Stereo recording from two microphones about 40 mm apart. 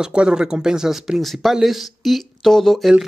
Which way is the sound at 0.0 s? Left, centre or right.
Right.